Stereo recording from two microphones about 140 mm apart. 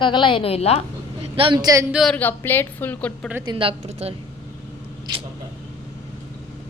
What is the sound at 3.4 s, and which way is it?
Speech, 35° right (ahead or behind).